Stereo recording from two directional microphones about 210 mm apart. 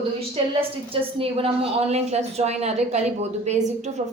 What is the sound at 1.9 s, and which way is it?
A woman's voice, 30° right (ahead or behind).